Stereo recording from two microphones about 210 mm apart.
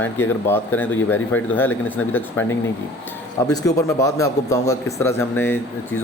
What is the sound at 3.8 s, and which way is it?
Speech, 15° left (ahead or behind).